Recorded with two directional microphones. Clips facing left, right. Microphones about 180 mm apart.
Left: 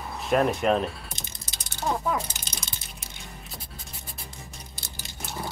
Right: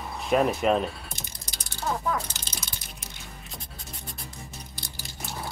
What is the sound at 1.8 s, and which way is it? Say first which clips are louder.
Speech: left 2 dB; 15° left (ahead or behind).